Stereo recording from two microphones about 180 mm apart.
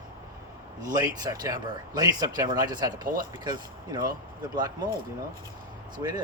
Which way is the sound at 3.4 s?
20° right (ahead or behind).